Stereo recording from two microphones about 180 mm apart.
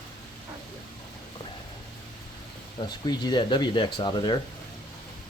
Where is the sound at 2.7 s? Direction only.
25° left (ahead or behind).